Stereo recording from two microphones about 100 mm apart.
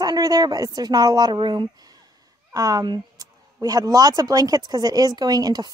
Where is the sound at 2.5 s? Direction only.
40° right (ahead or behind).